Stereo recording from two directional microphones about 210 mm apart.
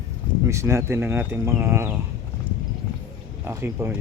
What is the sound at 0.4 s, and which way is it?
Speech, 10° right (ahead or behind).